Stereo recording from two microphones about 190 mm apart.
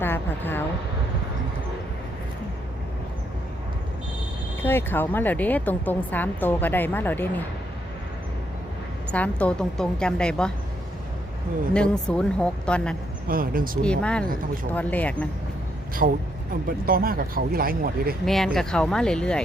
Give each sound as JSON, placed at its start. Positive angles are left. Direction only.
{"t": 0.0, "sound": "a sound", "side_deg": 10}
{"t": 4.6, "sound": "speech", "side_deg": 10}
{"t": 9.1, "sound": "a woman's voice", "side_deg": 5}
{"t": 11.7, "sound": "a woman's voice", "side_deg": 5}
{"t": 13.2, "sound": "speech", "side_deg": -50}
{"t": 13.8, "sound": "a woman's voice", "side_deg": 5}
{"t": 16.0, "sound": "speech", "side_deg": -45}
{"t": 18.3, "sound": "a woman's voice", "side_deg": 0}